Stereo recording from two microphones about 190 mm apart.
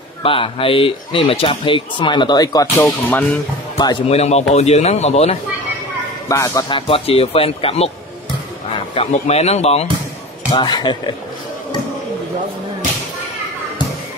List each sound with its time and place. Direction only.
0.2 s speech: 30° left (ahead or behind); by 3.3 s 15° left (ahead or behind)
3.7 s speech: 25° left (ahead or behind)
4.2 s speech: 35° left (ahead or behind)
6.2 s a man's voice: 15° left (ahead or behind)
6.9 s speech: 30° left (ahead or behind)
8.9 s speech: 30° left (ahead or behind)
10.5 s speech: 20° left (ahead or behind)